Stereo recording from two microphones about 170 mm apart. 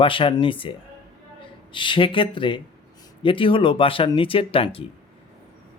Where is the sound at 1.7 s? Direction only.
30° left (ahead or behind).